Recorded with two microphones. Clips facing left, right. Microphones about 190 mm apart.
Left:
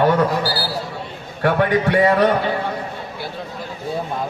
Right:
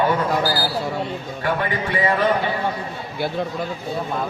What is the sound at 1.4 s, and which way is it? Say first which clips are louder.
Speech: left 7 dB; 70° left (ahead or behind).